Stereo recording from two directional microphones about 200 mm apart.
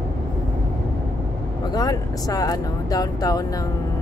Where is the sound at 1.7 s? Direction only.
20° left (ahead or behind).